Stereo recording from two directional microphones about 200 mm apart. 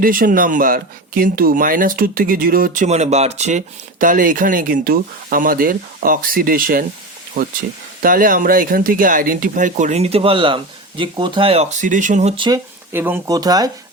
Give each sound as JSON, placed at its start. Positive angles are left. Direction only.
{"t": 0.0, "sound": "speech", "side_deg": -45}
{"t": 8.0, "sound": "speech", "side_deg": -45}
{"t": 12.9, "sound": "speech", "side_deg": -10}